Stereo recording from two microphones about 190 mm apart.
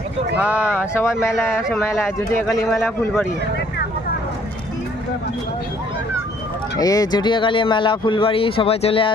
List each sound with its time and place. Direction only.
0.8 s speech: 15° left (ahead or behind)
6.7 s speech: 20° left (ahead or behind)